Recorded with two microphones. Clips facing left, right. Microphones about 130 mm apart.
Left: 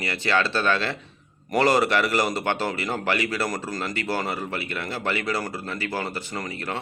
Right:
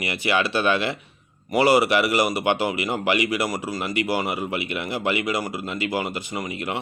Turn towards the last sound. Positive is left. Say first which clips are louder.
# right 2 dB
turn(degrees=-15)  # may be behind; listen again after turning